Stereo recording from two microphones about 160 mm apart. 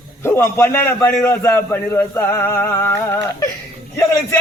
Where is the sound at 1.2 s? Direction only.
15° left (ahead or behind).